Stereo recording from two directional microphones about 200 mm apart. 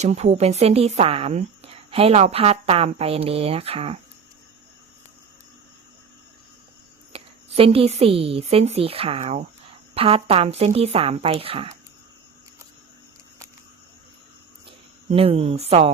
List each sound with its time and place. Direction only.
0.0 s a woman's voice: 35° right (ahead or behind)
7.1 s a woman's voice: 30° right (ahead or behind)
15.1 s a woman's voice: 30° right (ahead or behind)